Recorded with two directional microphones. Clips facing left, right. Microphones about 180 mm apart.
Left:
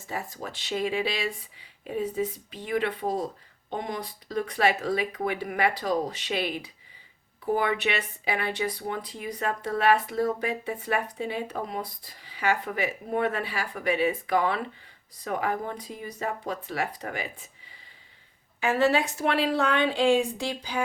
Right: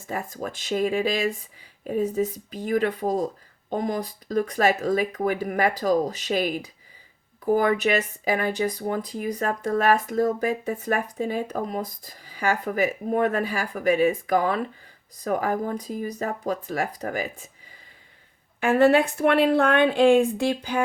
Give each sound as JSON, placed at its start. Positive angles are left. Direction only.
{"t": 0.1, "sound": "speech", "side_deg": -50}
{"t": 18.6, "sound": "a woman's voice", "side_deg": -55}